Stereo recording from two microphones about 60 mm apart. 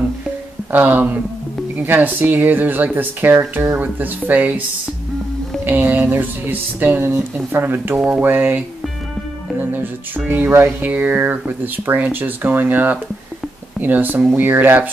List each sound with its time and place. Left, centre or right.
0.7 s speech: right
5.7 s speech: right